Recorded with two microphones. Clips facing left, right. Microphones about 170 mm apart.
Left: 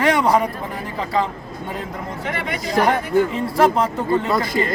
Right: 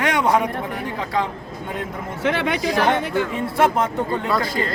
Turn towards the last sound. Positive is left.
turn(degrees=15)  # may be behind; listen again after turning